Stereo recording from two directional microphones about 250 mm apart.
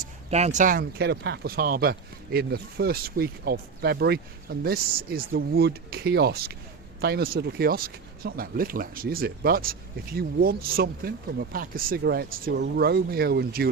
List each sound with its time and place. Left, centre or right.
0.3 s speech: right